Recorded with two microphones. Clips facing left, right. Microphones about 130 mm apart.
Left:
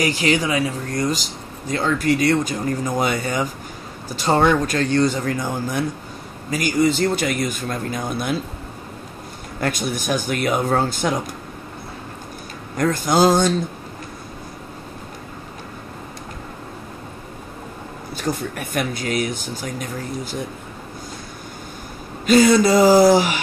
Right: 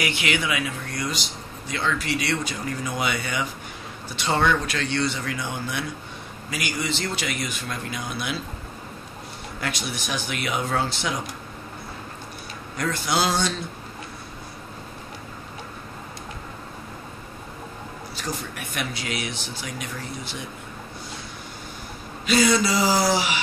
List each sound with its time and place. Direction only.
0.0 s speech: 35° left (ahead or behind)
9.6 s speech: 50° left (ahead or behind)
12.7 s speech: 45° left (ahead or behind)
18.1 s speech: 50° left (ahead or behind)
22.2 s speech: 45° left (ahead or behind)